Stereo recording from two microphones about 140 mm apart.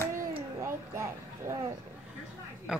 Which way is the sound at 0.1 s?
20° right (ahead or behind).